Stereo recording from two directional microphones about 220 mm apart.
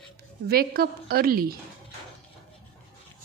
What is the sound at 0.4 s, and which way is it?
A woman's voice, 45° right (ahead or behind).